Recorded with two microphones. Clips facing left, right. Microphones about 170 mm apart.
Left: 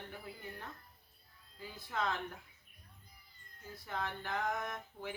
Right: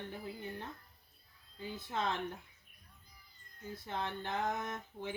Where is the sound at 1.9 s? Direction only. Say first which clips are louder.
Even; 25° right (ahead or behind).